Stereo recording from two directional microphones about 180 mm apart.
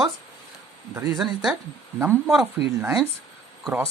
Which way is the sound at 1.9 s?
15° right (ahead or behind).